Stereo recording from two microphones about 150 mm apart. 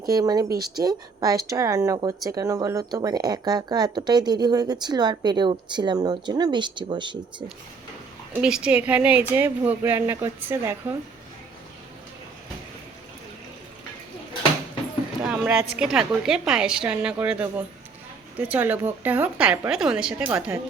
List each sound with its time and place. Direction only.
0.1 s speech: 25° right (ahead or behind)
8.3 s speech: 5° right (ahead or behind)
15.2 s a sound: 10° right (ahead or behind)
15.8 s a woman's voice: 5° right (ahead or behind)